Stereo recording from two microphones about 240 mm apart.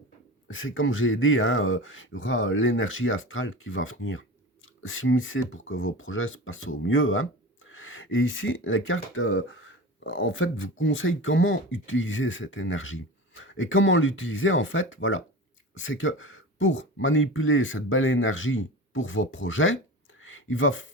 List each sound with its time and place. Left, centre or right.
0.4 s speech: left